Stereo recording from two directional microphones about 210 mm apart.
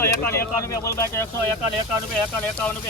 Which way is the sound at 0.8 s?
15° left (ahead or behind).